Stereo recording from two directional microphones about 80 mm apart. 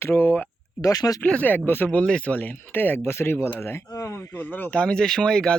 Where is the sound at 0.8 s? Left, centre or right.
Left.